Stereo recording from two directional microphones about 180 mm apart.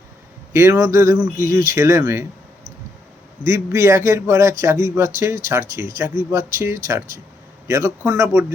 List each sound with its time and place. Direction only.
0.5 s speech: 15° right (ahead or behind)
3.4 s speech: 15° right (ahead or behind)